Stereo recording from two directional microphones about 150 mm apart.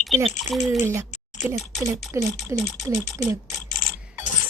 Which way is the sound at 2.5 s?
20° right (ahead or behind).